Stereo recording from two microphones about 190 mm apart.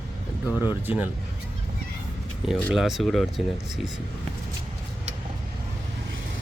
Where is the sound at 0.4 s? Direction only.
10° right (ahead or behind).